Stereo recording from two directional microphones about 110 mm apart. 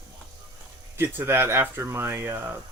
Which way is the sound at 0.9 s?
20° right (ahead or behind).